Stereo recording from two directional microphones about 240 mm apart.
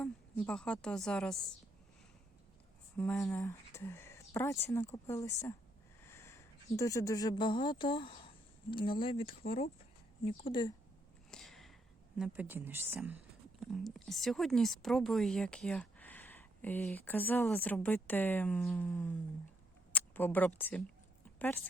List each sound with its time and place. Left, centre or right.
0.0 s a woman's voice: centre
3.0 s speech: centre; by 10.7 s left
11.3 s a sound: centre
12.1 s a woman's voice: centre